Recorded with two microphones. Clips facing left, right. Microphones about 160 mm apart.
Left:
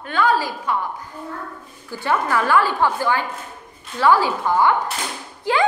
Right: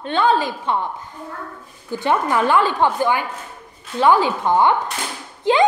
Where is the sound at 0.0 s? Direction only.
25° right (ahead or behind).